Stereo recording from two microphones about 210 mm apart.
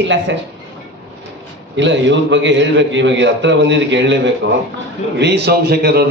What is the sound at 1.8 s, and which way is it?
A man's voice, 60° right (ahead or behind).